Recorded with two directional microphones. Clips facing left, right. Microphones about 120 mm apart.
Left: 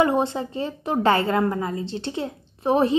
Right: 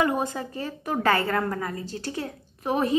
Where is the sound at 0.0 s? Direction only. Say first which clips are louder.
Left 4 dB; 25° left (ahead or behind).